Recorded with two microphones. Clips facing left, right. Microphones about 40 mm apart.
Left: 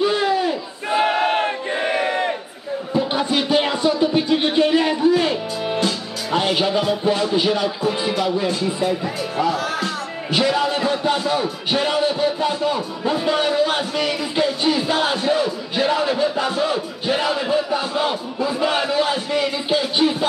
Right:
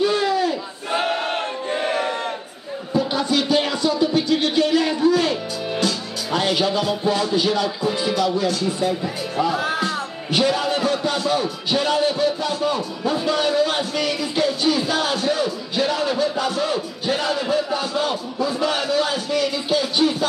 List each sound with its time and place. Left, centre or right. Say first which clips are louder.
0.0 s battle cry: left 1 dB; centre
2.9 s speech: even; left
10.3 s speech: left 1 dB; centre